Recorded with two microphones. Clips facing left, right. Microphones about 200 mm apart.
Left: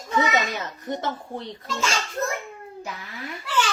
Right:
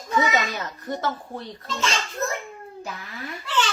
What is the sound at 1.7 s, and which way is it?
Speech, 10° left (ahead or behind).